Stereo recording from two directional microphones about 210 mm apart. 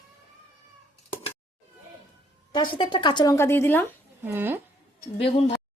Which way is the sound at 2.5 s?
20° left (ahead or behind).